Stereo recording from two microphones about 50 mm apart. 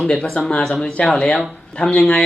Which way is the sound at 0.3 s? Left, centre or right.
Centre.